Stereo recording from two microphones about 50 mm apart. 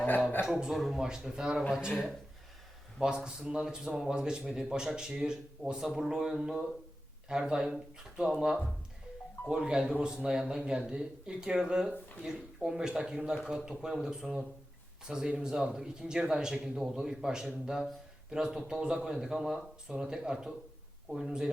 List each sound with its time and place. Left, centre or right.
0.4 s speech: centre
3.2 s speech: centre